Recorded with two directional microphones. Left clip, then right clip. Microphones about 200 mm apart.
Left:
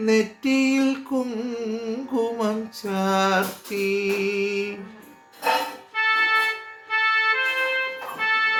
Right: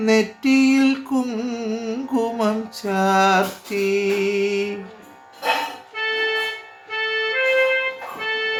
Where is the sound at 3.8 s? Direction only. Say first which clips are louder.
Right 3 dB; 20° right (ahead or behind).